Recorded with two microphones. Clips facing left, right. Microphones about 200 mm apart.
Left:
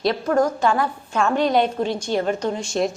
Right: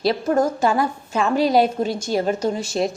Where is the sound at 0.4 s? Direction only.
10° right (ahead or behind).